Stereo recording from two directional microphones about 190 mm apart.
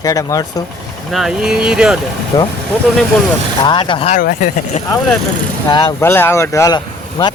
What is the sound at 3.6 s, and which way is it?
Speech, 25° left (ahead or behind).